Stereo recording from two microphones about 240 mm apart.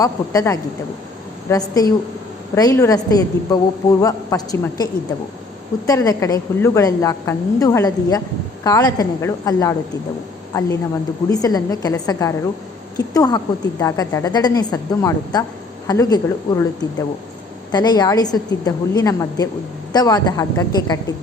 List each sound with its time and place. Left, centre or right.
0.0 s a woman's voice: centre
17.7 s a woman's voice: centre